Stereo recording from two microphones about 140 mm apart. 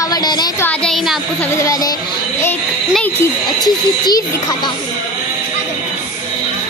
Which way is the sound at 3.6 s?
30° left (ahead or behind).